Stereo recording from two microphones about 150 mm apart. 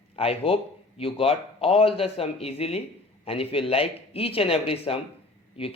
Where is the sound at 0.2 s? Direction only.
40° left (ahead or behind).